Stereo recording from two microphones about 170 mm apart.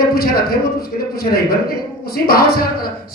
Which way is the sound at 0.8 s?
60° left (ahead or behind).